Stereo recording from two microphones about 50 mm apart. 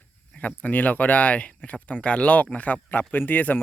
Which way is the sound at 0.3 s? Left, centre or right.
Left.